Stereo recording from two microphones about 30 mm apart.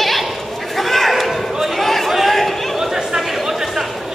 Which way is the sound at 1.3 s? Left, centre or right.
Centre.